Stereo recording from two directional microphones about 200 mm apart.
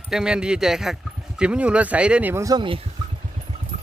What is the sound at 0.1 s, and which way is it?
Speech, 5° right (ahead or behind).